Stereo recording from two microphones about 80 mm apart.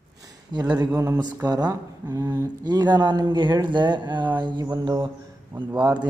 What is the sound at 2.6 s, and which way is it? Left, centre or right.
Speech, right.